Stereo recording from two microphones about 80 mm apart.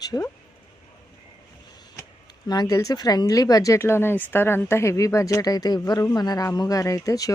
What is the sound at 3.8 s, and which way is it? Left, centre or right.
A man's voice, left.